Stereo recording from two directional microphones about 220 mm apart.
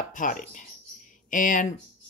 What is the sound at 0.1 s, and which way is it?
Speech, 35° left (ahead or behind).